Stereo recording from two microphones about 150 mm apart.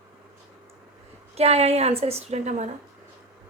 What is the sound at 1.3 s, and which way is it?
A woman's voice, 45° right (ahead or behind).